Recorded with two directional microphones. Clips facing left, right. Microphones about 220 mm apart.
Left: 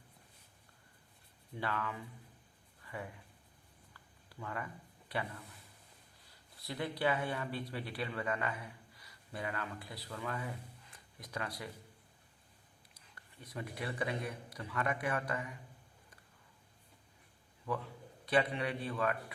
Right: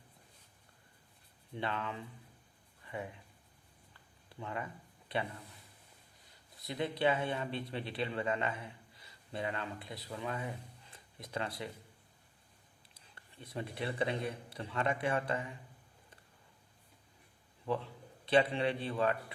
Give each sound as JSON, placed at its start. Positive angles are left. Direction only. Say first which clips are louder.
{"t": 1.5, "sound": "speech", "louder": "right 1 dB", "side_deg": -25}
{"t": 3.9, "sound": "a sound", "louder": "right 2 dB", "side_deg": -25}
{"t": 6.6, "sound": "speech", "louder": "right 3 dB", "side_deg": -20}
{"t": 12.9, "sound": "a man's voice", "louder": "right 2 dB", "side_deg": -25}
{"t": 17.7, "sound": "speech", "louder": "right 3 dB", "side_deg": -25}